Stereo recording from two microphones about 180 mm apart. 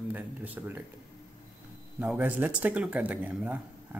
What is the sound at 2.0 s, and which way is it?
A man's voice, 10° right (ahead or behind).